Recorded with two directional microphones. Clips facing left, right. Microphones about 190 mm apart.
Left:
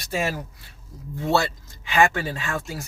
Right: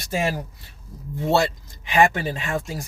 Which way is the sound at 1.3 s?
20° right (ahead or behind).